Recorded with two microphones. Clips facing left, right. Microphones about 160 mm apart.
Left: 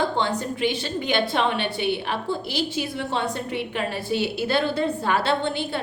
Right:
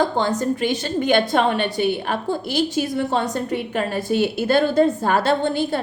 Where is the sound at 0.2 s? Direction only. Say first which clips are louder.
Right 4 dB; 40° right (ahead or behind).